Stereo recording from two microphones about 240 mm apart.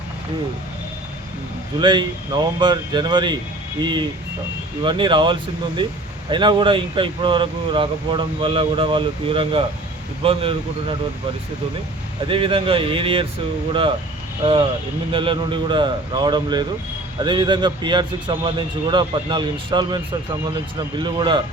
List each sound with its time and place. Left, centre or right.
1.8 s speech: centre
12.3 s speech: right
15.1 s speech: right